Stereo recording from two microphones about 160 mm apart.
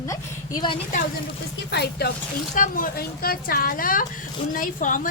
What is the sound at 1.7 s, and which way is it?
Speech, 90° left.